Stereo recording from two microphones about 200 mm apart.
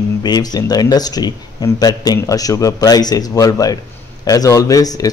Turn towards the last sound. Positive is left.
turn(degrees=20)  # may be behind; listen again after turning